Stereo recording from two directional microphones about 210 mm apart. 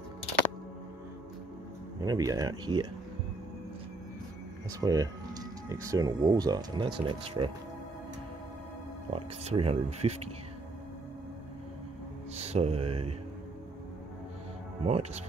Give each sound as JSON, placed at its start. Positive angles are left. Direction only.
{"t": 2.0, "sound": "speech", "side_deg": -15}
{"t": 4.7, "sound": "speech", "side_deg": -15}
{"t": 9.1, "sound": "speech", "side_deg": -30}
{"t": 12.4, "sound": "music", "side_deg": -30}
{"t": 14.8, "sound": "speech", "side_deg": -30}